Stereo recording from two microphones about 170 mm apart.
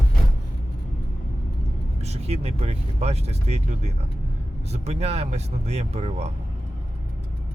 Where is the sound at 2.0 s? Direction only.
40° right (ahead or behind).